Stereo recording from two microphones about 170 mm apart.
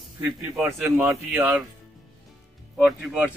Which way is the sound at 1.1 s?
5° right (ahead or behind).